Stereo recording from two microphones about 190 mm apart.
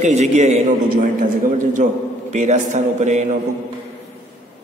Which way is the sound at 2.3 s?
40° right (ahead or behind).